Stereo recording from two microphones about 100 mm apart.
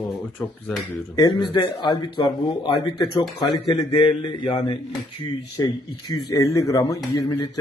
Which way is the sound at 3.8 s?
85° left.